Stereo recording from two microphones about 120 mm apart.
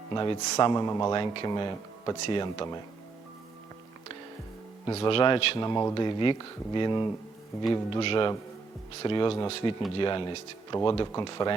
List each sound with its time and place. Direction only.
0.1 s speech: 35° left (ahead or behind)
1.1 s speech: 40° left (ahead or behind)
4.9 s speech: 50° left (ahead or behind)
9.5 s speech: 55° left (ahead or behind)
10.0 s speech: 40° left (ahead or behind)